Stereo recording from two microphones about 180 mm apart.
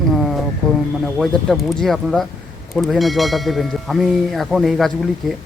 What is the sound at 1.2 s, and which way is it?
Speech, centre (ahead or behind).